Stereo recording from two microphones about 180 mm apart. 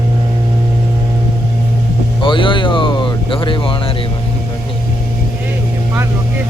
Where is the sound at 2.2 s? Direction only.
25° left (ahead or behind).